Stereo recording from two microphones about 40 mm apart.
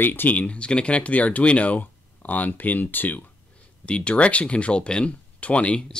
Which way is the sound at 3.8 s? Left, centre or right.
Left.